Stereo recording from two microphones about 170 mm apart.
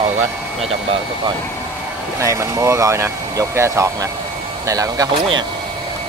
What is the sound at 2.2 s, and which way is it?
Speech, 20° right (ahead or behind).